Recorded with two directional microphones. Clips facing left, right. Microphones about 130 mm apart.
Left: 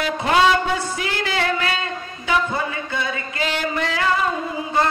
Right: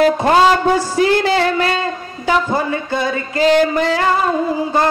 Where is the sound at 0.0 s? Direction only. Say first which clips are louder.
Right 6 dB; 40° right (ahead or behind).